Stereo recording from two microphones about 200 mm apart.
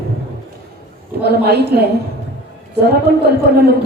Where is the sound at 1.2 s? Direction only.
55° right (ahead or behind).